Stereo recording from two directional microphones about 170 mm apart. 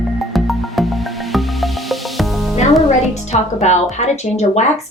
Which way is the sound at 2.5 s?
40° left (ahead or behind).